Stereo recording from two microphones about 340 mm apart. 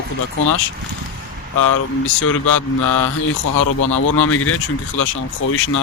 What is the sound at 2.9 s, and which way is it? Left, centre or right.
Speech, left.